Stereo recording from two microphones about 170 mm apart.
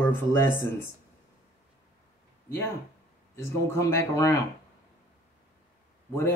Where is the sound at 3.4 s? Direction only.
15° left (ahead or behind).